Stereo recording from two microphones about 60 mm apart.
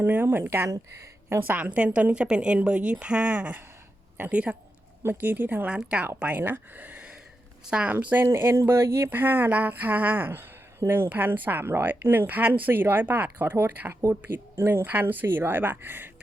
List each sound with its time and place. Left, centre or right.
0.0 s speech: right
1.4 s a woman's voice: right
5.0 s speech: right
5.6 s speech: right
7.7 s a woman's voice: centre
7.9 s speech: right
14.8 s speech: right